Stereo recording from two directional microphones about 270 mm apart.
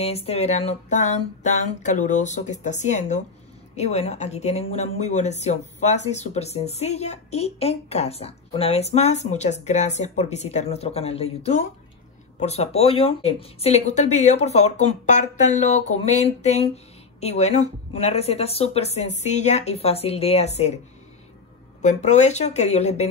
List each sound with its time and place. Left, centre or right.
0.0 s speech: left
21.8 s speech: left